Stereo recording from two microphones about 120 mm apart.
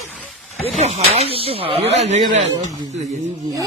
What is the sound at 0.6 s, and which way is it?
Speech, 65° right (ahead or behind).